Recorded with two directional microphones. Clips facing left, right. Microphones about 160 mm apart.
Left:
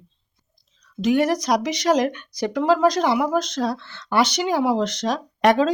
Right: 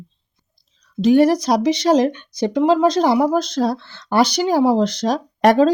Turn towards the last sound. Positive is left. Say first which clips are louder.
# right 4 dB
turn(degrees=-40)  # may be behind; listen again after turning